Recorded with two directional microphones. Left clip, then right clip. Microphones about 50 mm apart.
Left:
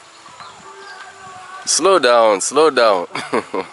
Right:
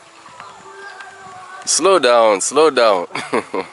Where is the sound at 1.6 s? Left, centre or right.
Centre.